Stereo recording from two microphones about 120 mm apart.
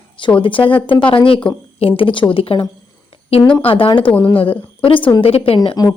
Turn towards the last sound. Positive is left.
turn(degrees=50)  # may be behind; listen again after turning